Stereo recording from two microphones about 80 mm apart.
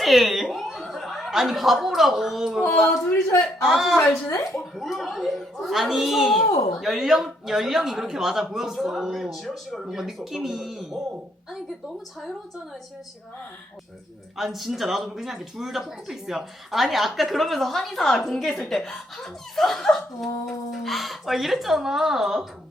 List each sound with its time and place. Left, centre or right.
0.0 s speech: centre
4.3 s speech: left
4.6 s speech: centre
14.3 s speech: centre